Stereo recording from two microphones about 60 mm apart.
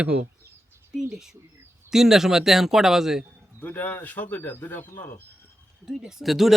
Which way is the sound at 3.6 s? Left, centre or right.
Left.